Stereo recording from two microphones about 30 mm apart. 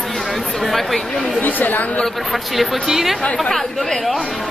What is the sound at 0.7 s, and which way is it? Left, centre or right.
Speech, centre.